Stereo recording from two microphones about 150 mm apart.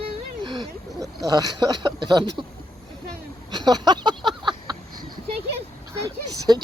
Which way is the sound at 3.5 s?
25° right (ahead or behind).